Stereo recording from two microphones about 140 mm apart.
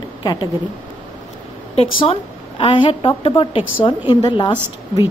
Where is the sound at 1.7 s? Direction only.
45° left (ahead or behind).